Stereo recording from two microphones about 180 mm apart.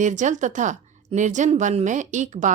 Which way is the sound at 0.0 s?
45° right (ahead or behind).